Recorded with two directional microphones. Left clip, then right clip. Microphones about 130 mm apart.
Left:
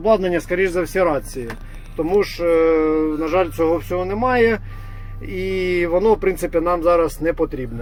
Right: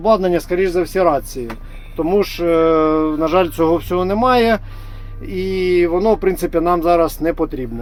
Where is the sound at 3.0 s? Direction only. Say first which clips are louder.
Right 4 dB; 25° right (ahead or behind).